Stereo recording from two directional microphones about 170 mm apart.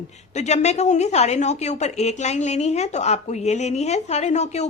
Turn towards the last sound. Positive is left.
turn(degrees=40)  # may be behind; listen again after turning